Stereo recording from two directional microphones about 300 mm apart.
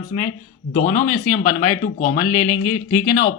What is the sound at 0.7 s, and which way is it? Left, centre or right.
Speech, left.